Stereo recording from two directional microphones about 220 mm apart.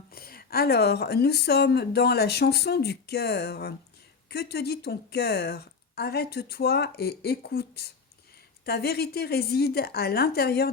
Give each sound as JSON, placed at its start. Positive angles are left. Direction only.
{"t": 0.1, "sound": "speech", "side_deg": 45}